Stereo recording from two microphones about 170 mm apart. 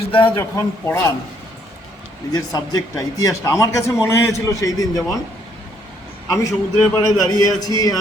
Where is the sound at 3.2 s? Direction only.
20° left (ahead or behind).